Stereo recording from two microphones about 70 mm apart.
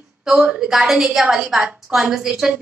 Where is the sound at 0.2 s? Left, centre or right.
Centre.